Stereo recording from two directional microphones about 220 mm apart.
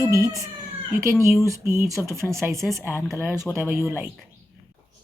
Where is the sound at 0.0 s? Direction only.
15° right (ahead or behind).